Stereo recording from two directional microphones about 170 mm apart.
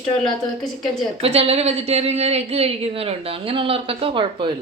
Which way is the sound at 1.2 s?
35° right (ahead or behind).